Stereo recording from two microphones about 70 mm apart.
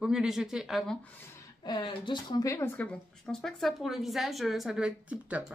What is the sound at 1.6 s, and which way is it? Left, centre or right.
Speech, left.